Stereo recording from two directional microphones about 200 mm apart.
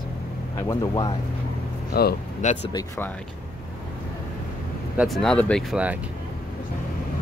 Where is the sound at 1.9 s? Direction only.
50° left (ahead or behind).